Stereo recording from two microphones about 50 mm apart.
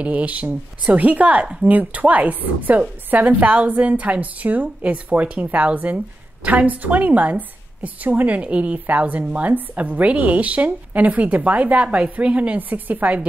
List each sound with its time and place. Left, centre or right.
0.0 s a woman's voice: right